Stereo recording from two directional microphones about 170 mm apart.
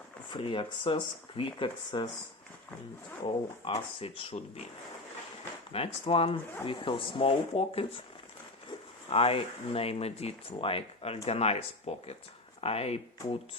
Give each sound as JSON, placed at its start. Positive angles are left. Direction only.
{"t": 0.3, "sound": "speech", "side_deg": 30}
{"t": 3.2, "sound": "speech", "side_deg": 35}
{"t": 5.7, "sound": "speech", "side_deg": 35}
{"t": 9.0, "sound": "speech", "side_deg": 35}